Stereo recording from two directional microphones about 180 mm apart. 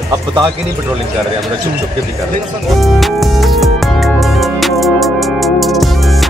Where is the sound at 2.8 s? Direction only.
Centre (ahead or behind).